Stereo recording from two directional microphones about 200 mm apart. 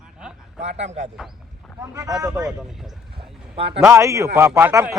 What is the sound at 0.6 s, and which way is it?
Speech, 35° right (ahead or behind).